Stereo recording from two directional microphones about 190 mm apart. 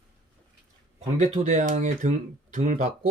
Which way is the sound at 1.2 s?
35° right (ahead or behind).